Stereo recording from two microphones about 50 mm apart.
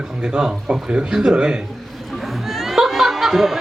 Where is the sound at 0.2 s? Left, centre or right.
Centre.